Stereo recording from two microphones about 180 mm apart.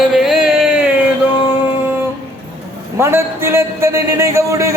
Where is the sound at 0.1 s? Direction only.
Centre (ahead or behind).